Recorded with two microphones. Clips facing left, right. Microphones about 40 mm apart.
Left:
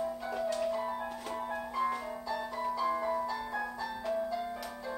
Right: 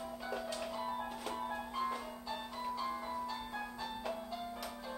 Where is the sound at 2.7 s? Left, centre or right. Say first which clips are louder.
Left 9 dB; left.